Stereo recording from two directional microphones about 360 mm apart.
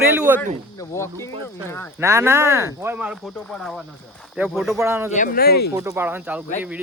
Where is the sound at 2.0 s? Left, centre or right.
Centre.